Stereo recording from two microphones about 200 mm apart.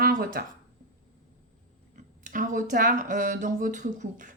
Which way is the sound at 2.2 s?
40° right (ahead or behind).